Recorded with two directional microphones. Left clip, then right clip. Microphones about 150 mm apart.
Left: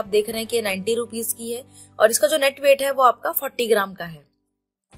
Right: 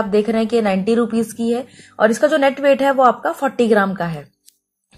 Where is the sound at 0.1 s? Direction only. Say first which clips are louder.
Right 3 dB; 25° left (ahead or behind).